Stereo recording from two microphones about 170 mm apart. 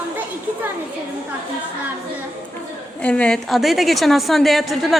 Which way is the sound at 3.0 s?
5° left (ahead or behind).